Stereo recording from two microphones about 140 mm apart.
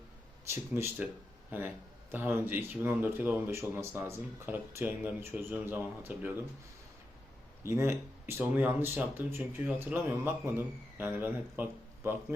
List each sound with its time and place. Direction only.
0.5 s speech: 15° right (ahead or behind)
7.6 s speech: 20° right (ahead or behind)